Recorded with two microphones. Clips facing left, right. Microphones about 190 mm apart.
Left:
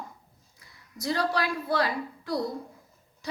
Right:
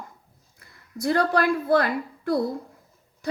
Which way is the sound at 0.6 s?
55° right (ahead or behind).